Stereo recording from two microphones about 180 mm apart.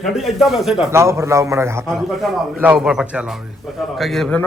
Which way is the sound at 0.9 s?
15° right (ahead or behind).